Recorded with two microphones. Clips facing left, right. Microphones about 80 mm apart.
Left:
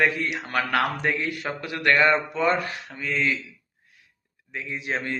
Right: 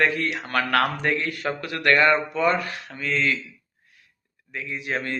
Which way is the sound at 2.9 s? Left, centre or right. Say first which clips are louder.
Right 1 dB; centre.